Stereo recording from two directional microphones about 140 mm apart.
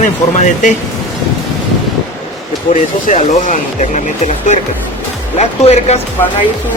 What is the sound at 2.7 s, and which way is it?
Speech, 55° left (ahead or behind).